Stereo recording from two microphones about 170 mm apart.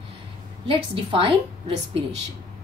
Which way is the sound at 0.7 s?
30° right (ahead or behind).